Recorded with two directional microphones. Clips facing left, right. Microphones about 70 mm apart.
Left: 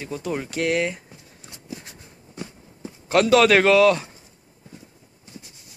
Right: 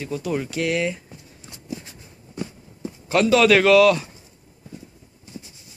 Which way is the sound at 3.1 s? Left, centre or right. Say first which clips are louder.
Even; left.